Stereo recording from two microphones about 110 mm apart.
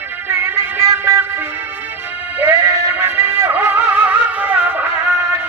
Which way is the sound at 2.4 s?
30° right (ahead or behind).